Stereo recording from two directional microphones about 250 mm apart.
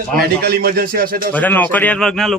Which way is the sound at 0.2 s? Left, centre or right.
Right.